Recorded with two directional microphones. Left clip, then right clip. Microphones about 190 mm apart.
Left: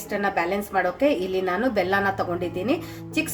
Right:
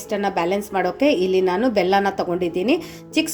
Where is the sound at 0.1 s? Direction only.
30° right (ahead or behind).